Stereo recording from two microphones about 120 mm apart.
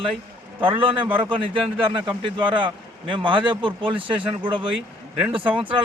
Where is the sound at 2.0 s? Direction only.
40° right (ahead or behind).